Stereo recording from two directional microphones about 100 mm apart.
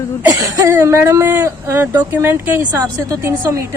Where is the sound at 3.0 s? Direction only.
35° right (ahead or behind).